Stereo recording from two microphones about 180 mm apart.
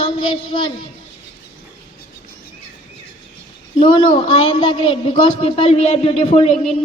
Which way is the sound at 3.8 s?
30° left (ahead or behind).